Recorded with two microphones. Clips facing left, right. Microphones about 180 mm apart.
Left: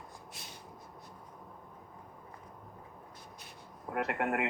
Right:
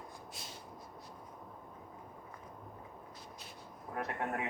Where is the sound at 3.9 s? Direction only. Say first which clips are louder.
Left 5 dB; 85° left.